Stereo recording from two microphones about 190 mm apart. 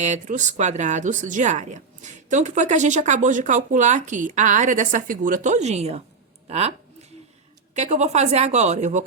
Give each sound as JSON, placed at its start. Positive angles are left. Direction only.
{"t": 0.0, "sound": "speech", "side_deg": -40}